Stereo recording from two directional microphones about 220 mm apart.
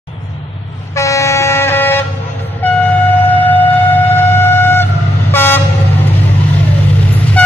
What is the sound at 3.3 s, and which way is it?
Shofar, 10° left (ahead or behind).